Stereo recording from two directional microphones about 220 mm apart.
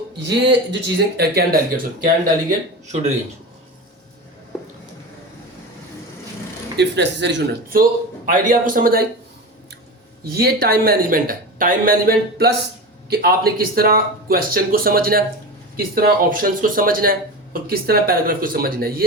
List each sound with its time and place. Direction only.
0.3 s speech: 50° right (ahead or behind); by 3.0 s 35° right (ahead or behind)
6.7 s speech: 50° right (ahead or behind)
10.2 s speech: 45° right (ahead or behind)